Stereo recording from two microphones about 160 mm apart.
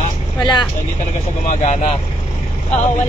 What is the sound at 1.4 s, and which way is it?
Speech, 50° left (ahead or behind).